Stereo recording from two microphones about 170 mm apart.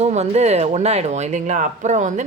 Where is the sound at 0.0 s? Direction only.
40° right (ahead or behind).